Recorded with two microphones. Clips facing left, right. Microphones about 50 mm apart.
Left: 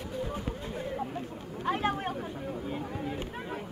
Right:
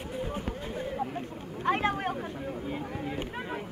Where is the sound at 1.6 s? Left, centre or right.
Right.